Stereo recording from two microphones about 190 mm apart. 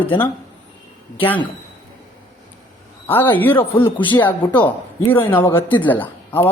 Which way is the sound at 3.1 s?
10° left (ahead or behind).